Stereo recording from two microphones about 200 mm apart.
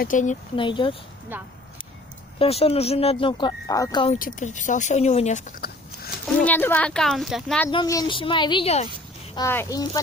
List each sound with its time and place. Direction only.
0.0 s speech: 40° left (ahead or behind)
0.5 s speech: 25° left (ahead or behind)
1.3 s speech: 10° right (ahead or behind)
2.4 s speech: 30° left (ahead or behind)
4.2 s speech: 40° left (ahead or behind)
6.4 s speech: 10° left (ahead or behind)
7.7 s speech: 20° left (ahead or behind)
9.3 s a child's voice: 15° left (ahead or behind)